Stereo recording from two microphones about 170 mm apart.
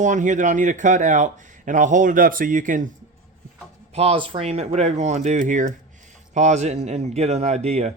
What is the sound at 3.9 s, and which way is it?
A man's voice, 35° right (ahead or behind).